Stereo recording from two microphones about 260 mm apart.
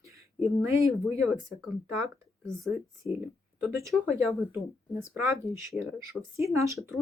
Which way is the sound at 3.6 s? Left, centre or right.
Centre.